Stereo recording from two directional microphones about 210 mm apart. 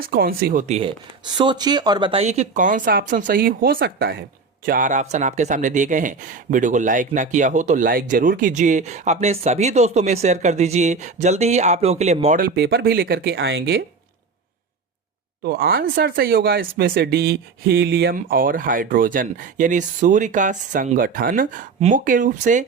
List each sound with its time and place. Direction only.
0.0 s speech: 45° right (ahead or behind)
0.7 s speech: 25° right (ahead or behind); by 4.2 s 50° right (ahead or behind)
4.6 s speech: 40° right (ahead or behind)
12.5 s speech: 50° right (ahead or behind)
15.4 s speech: 45° right (ahead or behind)